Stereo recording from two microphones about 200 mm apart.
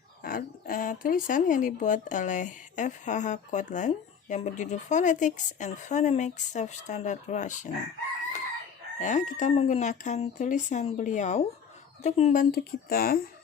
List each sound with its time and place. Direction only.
0.2 s speech: 45° left (ahead or behind)
9.0 s speech: 40° left (ahead or behind)